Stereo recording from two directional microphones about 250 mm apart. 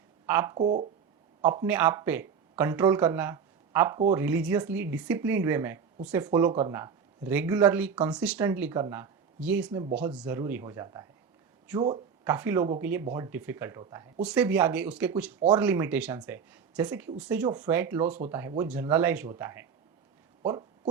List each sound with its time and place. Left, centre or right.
0.3 s speech: centre
1.6 s speech: centre
12.2 s speech: centre